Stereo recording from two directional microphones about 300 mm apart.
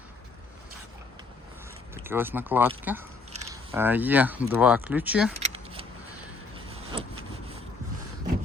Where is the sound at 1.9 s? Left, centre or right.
Centre.